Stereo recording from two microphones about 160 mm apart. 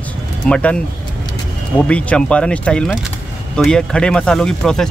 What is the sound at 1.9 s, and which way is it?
Speech, 5° left (ahead or behind).